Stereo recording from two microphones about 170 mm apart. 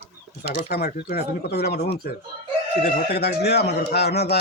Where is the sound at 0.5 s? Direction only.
60° left (ahead or behind).